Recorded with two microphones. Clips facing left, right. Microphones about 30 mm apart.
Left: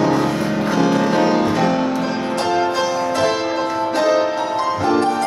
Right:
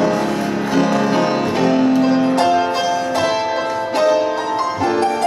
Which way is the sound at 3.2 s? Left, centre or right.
Centre.